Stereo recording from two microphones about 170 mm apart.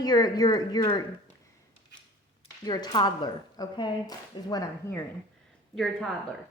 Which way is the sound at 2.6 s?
25° left (ahead or behind).